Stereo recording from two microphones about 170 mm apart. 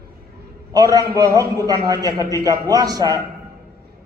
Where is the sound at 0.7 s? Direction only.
20° right (ahead or behind).